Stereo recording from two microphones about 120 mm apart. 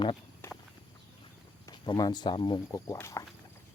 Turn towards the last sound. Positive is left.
turn(degrees=25)  # may be behind; listen again after turning